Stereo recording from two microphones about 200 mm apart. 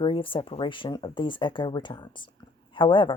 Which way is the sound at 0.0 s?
25° left (ahead or behind).